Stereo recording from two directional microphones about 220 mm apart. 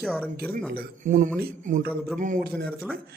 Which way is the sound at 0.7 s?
35° right (ahead or behind).